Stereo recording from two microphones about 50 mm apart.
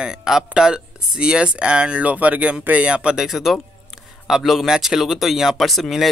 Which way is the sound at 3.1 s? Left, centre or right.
Centre.